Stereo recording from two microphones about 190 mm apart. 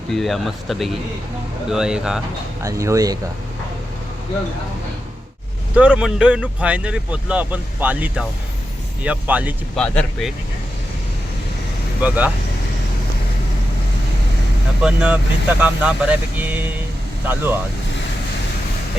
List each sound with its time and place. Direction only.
0.1 s speech: centre (ahead or behind)
2.6 s speech: 15° right (ahead or behind)
5.7 s speech: 5° right (ahead or behind)
9.7 s speech: 5° left (ahead or behind)
12.0 s speech: 5° right (ahead or behind)
14.8 s speech: 5° right (ahead or behind)